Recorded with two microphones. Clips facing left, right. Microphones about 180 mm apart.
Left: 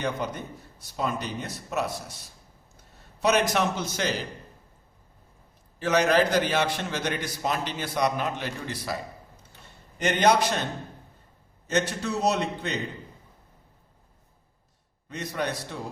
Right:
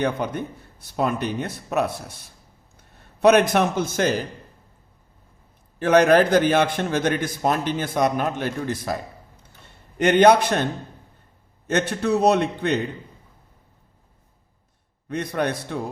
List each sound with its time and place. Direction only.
0.0 s a man's voice: 60° right (ahead or behind)
5.8 s a man's voice: 55° right (ahead or behind)
10.0 s speech: 60° right (ahead or behind)
11.7 s speech: 60° right (ahead or behind)
15.1 s speech: 55° right (ahead or behind)